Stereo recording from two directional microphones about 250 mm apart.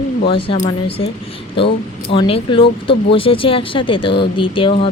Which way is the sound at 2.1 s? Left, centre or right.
Centre.